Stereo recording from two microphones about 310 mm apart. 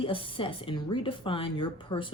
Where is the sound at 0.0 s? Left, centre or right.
Centre.